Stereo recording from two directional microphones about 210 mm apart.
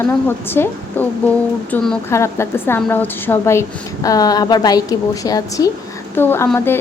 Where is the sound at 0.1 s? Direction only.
10° left (ahead or behind).